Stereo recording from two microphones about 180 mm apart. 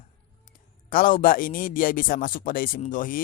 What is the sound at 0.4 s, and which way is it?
Speech, 50° left (ahead or behind).